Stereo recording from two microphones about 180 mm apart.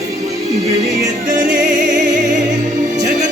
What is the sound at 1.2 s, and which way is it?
Music, 50° right (ahead or behind).